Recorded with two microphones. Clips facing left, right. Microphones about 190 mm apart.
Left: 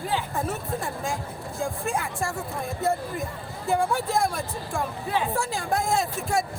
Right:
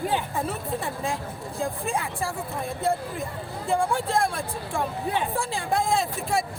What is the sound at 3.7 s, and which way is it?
Speech, 5° left (ahead or behind).